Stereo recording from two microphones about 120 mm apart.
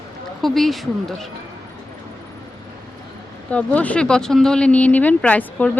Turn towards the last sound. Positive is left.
turn(degrees=15)  # may be behind; listen again after turning